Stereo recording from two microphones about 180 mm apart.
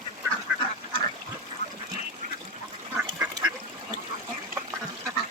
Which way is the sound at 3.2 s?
20° right (ahead or behind).